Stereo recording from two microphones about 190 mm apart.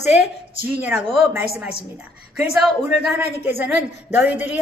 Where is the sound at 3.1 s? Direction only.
10° right (ahead or behind).